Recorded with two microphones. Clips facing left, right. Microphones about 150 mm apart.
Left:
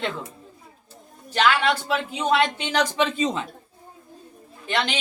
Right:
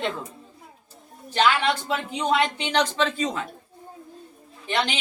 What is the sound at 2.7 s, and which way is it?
Speech, 15° left (ahead or behind).